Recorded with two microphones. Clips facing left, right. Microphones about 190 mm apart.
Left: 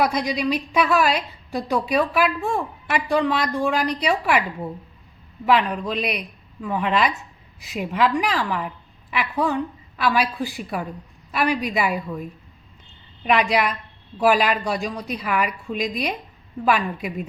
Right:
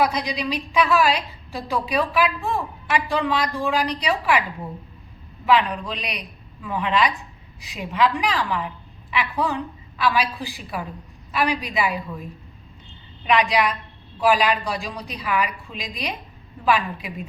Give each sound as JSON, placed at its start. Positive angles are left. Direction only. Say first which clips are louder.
{"t": 0.0, "sound": "a woman's voice", "louder": "left 1 dB", "side_deg": 50}
{"t": 5.5, "sound": "a woman's voice", "louder": "even", "side_deg": 50}
{"t": 13.2, "sound": "a woman's voice", "louder": "even", "side_deg": 50}